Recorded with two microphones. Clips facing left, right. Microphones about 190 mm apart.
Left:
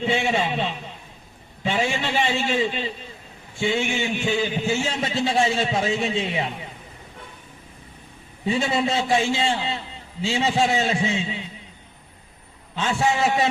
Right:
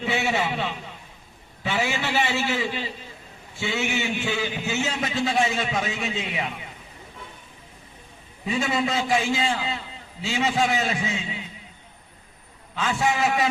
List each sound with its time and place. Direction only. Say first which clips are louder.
0.0 s a man's voice: left 2 dB; 25° left (ahead or behind)
8.4 s a man's voice: left 2 dB; 30° left (ahead or behind)
12.7 s a man's voice: left 2 dB; 30° left (ahead or behind)